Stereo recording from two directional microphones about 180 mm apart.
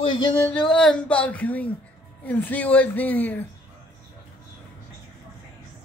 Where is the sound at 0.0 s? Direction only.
30° left (ahead or behind).